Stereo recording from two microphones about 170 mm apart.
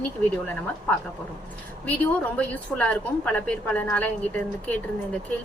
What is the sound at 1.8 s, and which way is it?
A woman's voice, 10° left (ahead or behind).